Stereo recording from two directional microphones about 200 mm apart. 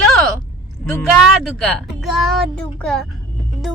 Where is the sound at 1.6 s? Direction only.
Centre (ahead or behind).